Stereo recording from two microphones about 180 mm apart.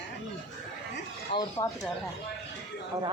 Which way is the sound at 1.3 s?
30° left (ahead or behind).